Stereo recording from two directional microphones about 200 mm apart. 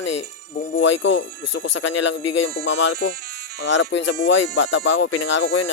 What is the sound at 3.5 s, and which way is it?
Speech, 65° left (ahead or behind).